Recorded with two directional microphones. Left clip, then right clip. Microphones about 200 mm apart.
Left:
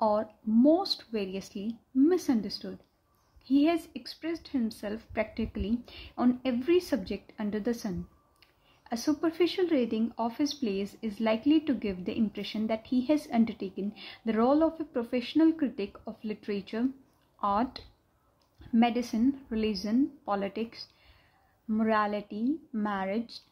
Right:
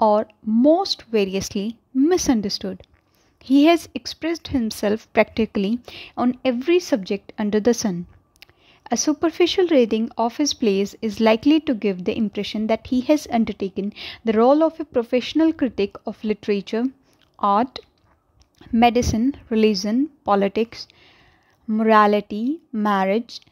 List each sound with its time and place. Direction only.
0.0 s a woman's voice: 45° right (ahead or behind)